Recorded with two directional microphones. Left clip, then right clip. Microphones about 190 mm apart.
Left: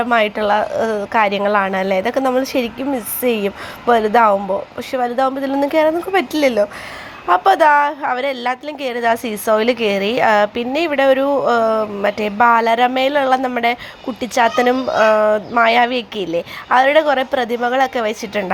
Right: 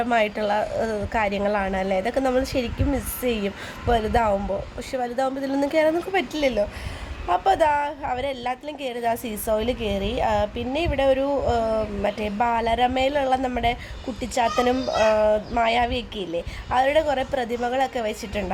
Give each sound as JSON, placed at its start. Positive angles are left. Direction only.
{"t": 0.0, "sound": "a woman's voice", "side_deg": 5}
{"t": 6.3, "sound": "a woman's voice", "side_deg": 15}